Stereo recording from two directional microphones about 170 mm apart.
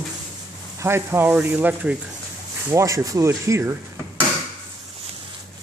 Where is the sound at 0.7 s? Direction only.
15° right (ahead or behind).